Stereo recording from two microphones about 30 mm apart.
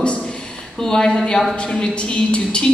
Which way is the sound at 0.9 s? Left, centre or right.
Left.